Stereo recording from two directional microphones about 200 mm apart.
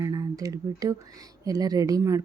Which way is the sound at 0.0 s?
15° right (ahead or behind).